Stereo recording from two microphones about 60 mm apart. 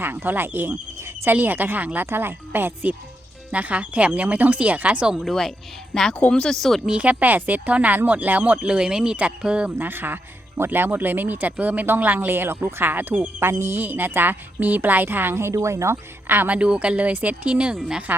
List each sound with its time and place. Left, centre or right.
0.0 s speech: right; by 5.1 s centre
5.1 s speech: centre
6.8 s speech: right
9.7 s speech: right
16.2 s speech: right
16.6 s speech: centre
18.1 s speech: right